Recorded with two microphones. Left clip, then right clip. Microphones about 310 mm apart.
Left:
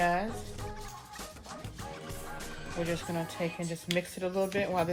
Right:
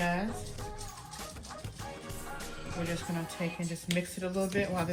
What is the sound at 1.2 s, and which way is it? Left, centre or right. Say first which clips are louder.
Music: right 1 dB; centre.